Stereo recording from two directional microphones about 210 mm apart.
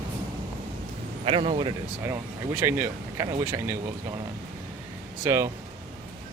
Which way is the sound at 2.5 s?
10° right (ahead or behind).